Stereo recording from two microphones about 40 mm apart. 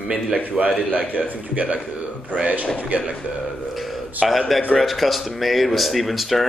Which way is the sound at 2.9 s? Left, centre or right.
Right.